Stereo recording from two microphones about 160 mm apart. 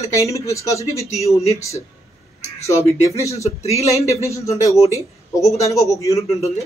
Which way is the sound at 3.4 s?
40° left (ahead or behind).